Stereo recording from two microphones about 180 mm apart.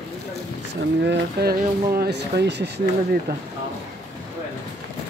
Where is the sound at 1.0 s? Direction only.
65° right (ahead or behind).